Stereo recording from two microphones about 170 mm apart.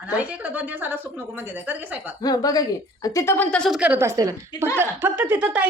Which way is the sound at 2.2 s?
20° left (ahead or behind).